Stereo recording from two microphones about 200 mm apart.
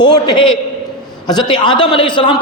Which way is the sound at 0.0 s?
20° left (ahead or behind).